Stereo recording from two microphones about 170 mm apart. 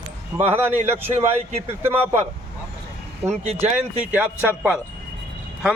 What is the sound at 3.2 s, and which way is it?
Speech, 40° right (ahead or behind).